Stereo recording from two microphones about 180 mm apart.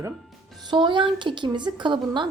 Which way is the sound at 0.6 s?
25° right (ahead or behind).